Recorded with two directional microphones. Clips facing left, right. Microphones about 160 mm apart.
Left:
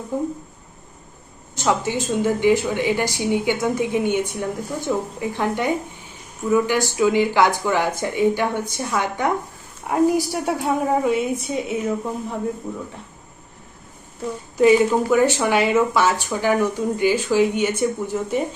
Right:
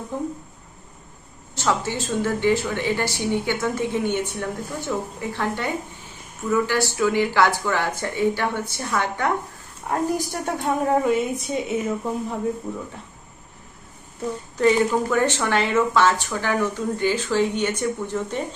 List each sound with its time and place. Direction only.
1.5 s a woman's voice: 15° left (ahead or behind); by 12.4 s centre (ahead or behind)
14.6 s a woman's voice: 10° left (ahead or behind)